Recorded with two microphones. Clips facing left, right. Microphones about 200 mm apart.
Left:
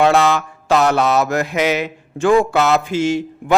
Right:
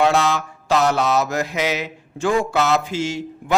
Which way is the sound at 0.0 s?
55° left (ahead or behind).